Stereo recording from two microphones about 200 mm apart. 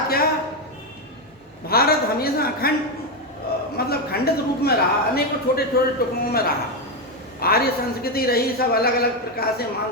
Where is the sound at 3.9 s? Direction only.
50° left (ahead or behind).